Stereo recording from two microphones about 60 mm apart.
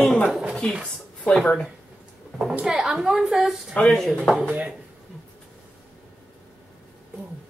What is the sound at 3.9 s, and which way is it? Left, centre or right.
Speech, centre.